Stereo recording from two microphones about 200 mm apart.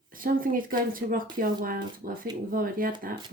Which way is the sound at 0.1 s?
45° right (ahead or behind).